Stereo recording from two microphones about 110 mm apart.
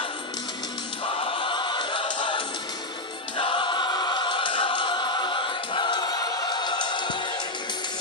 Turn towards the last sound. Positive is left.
turn(degrees=45)  # may be behind; listen again after turning